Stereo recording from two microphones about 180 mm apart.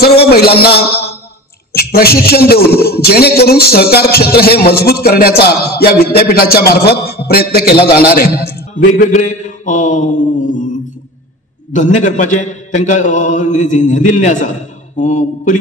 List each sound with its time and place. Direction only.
0.2 s a sound: 60° left (ahead or behind)
1.7 s a man's voice: 60° left (ahead or behind)
9.1 s a man's voice: 45° left (ahead or behind)
11.7 s a man's voice: 45° left (ahead or behind)